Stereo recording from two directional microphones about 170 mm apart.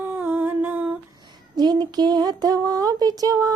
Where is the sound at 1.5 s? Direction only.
25° right (ahead or behind).